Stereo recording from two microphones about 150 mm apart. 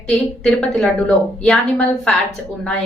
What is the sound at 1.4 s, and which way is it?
Speech, 5° left (ahead or behind).